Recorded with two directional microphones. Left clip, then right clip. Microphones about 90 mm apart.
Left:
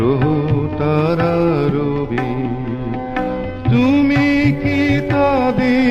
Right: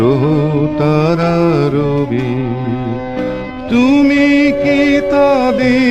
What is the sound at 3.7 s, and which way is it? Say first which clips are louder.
Music: right 4 dB; 30° right (ahead or behind).